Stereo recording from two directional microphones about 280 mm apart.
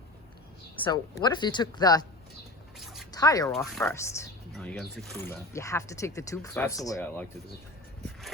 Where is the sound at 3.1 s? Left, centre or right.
Centre.